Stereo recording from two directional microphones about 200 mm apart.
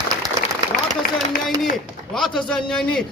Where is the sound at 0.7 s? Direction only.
45° left (ahead or behind).